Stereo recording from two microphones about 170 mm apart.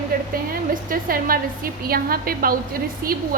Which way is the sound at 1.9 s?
60° right (ahead or behind).